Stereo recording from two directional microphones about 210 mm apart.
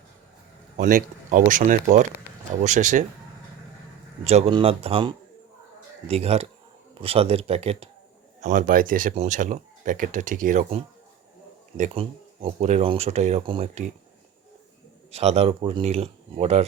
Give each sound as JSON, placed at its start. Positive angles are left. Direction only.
{"t": 0.8, "sound": "speech", "side_deg": -40}
{"t": 4.2, "sound": "speech", "side_deg": -30}
{"t": 11.8, "sound": "speech", "side_deg": -30}
{"t": 15.1, "sound": "speech", "side_deg": -30}